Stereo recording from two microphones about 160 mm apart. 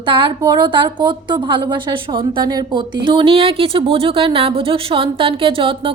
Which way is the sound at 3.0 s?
30° right (ahead or behind).